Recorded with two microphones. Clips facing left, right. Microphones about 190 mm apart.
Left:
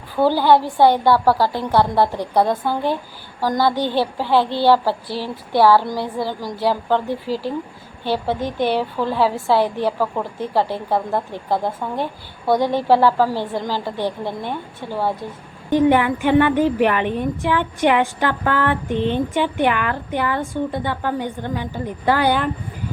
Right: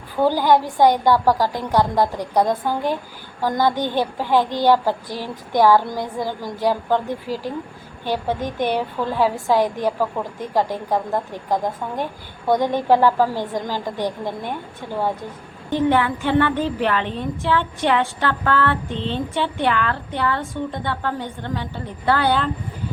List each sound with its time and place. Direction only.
0.2 s a woman's voice: 15° right (ahead or behind)
15.7 s a woman's voice: 15° left (ahead or behind)